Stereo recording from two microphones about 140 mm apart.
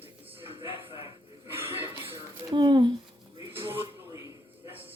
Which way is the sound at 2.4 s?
35° right (ahead or behind).